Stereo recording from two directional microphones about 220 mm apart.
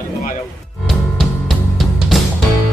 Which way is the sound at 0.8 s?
Centre (ahead or behind).